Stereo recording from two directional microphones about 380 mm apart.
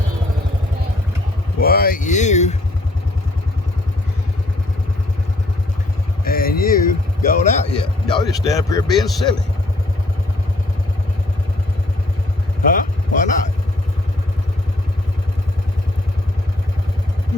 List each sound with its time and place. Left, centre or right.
1.5 s speech: left
6.2 s a sound: left
8.0 s speech: centre
12.7 s vehicle: centre